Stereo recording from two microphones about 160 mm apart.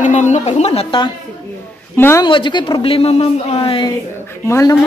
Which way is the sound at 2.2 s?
30° left (ahead or behind).